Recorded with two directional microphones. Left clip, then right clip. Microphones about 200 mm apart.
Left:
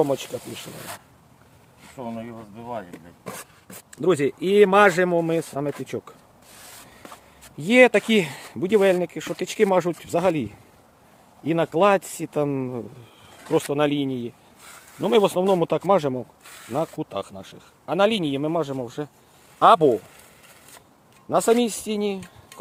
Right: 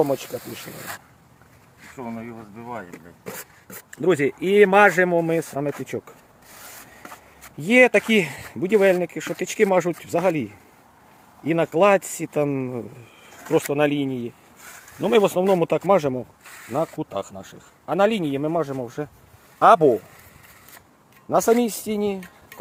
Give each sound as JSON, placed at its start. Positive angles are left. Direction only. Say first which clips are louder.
{"t": 0.0, "sound": "speech", "louder": "right 1 dB", "side_deg": 0}
{"t": 0.7, "sound": "speech", "louder": "right 2 dB", "side_deg": 30}
{"t": 2.0, "sound": "speech", "louder": "even", "side_deg": 25}
{"t": 2.9, "sound": "speech", "louder": "right 1 dB", "side_deg": 0}
{"t": 7.6, "sound": "speech", "louder": "even", "side_deg": 0}
{"t": 16.4, "sound": "snake", "louder": "right 2 dB", "side_deg": 55}
{"t": 16.6, "sound": "speech", "louder": "right 1 dB", "side_deg": -5}
{"t": 21.2, "sound": "speech", "louder": "right 1 dB", "side_deg": -10}